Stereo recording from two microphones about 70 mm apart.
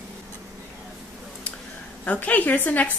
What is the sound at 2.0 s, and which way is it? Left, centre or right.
Speech, left.